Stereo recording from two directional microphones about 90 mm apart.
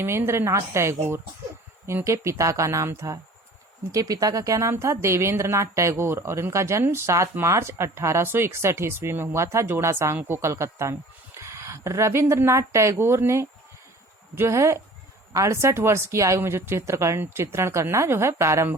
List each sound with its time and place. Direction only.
0.0 s a woman's voice: 30° right (ahead or behind)